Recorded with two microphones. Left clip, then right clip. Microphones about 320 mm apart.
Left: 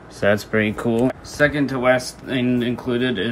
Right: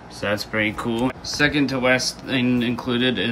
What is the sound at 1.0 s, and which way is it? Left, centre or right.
Speech, centre.